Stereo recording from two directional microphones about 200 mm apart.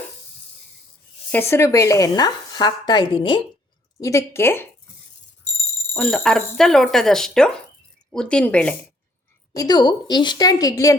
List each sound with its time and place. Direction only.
1.3 s speech: 10° left (ahead or behind)
5.9 s speech: 5° left (ahead or behind)
9.5 s speech: 20° left (ahead or behind)